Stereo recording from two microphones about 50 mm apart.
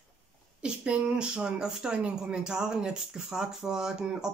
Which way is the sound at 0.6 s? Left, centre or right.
Centre.